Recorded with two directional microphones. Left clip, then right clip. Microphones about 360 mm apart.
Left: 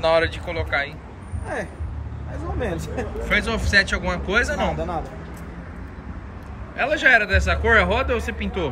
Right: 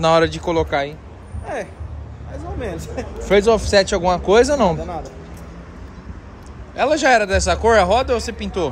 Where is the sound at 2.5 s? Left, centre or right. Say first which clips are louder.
Even; centre.